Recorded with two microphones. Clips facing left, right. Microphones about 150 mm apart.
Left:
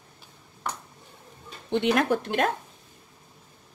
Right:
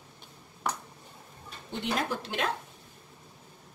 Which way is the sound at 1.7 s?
70° left (ahead or behind).